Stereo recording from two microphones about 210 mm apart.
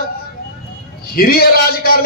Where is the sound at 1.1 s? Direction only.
45° left (ahead or behind).